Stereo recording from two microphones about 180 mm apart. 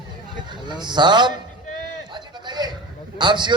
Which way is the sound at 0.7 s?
25° right (ahead or behind).